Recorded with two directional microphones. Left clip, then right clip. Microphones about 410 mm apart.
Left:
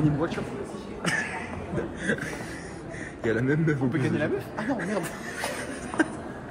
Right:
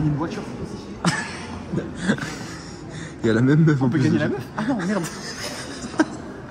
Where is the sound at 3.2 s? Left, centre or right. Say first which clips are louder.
Right 6 dB; centre.